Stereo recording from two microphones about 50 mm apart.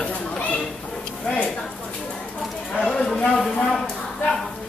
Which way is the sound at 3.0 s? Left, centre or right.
Centre.